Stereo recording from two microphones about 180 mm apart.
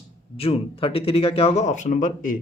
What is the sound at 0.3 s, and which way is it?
Speech, 30° left (ahead or behind).